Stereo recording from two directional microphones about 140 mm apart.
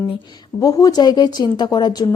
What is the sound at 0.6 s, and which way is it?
A woman's voice, 25° left (ahead or behind).